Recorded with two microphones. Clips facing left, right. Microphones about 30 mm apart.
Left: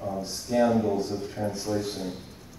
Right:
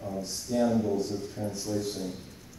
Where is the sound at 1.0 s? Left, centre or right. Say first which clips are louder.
Left 2 dB; left.